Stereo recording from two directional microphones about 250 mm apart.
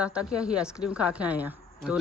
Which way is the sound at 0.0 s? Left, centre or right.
Centre.